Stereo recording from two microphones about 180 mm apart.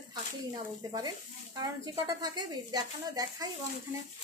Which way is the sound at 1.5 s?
25° right (ahead or behind).